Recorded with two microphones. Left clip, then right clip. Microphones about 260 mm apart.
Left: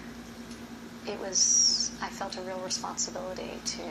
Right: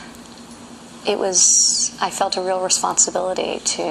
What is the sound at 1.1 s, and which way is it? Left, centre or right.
Speech, right.